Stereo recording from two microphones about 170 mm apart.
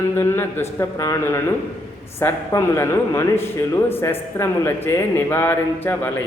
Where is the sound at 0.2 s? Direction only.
15° left (ahead or behind).